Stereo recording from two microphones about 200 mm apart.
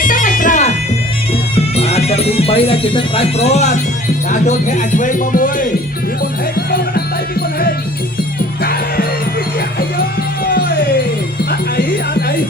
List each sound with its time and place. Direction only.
0.0 s music: 40° left (ahead or behind)
3.5 s speech: 35° left (ahead or behind)
6.7 s music: 50° left (ahead or behind)
10.4 s music: 45° left (ahead or behind)